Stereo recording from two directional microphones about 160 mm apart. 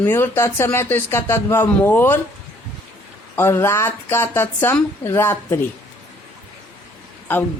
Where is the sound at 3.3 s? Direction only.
15° left (ahead or behind).